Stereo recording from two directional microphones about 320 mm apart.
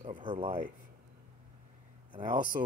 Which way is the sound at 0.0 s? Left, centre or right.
Centre.